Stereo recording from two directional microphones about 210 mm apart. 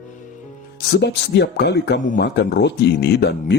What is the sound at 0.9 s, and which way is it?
Speech, 55° left (ahead or behind).